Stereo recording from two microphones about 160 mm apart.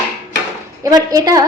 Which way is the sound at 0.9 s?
25° right (ahead or behind).